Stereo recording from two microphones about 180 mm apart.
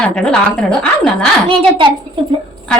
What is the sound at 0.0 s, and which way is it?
A woman's voice, 5° left (ahead or behind).